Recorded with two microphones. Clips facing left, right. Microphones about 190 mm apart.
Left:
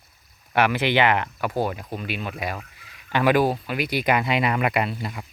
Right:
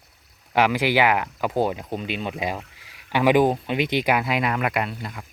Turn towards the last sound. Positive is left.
turn(degrees=5)  # may be behind; listen again after turning